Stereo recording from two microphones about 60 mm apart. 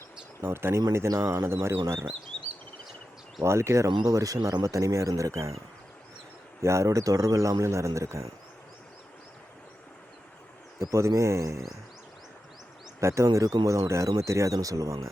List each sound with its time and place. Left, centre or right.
0.4 s speech: right
0.9 s speech: right
3.4 s speech: right
6.6 s speech: right
10.8 s speech: right
13.0 s speech: right